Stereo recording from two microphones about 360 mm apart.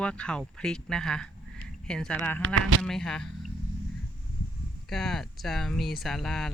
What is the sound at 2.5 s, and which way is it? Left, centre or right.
Speech, right.